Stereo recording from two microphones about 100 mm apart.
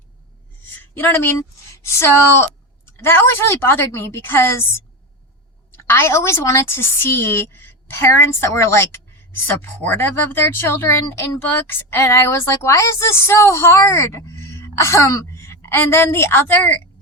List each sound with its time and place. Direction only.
0.9 s a woman's voice: 25° left (ahead or behind)